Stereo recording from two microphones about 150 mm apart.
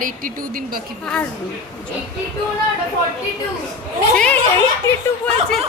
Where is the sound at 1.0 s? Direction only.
5° left (ahead or behind).